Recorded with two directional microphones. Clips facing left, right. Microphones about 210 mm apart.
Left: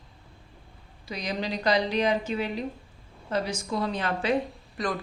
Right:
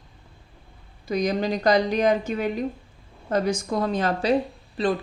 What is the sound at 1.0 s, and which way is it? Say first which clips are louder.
A woman's voice: right 8 dB; 50° right (ahead or behind).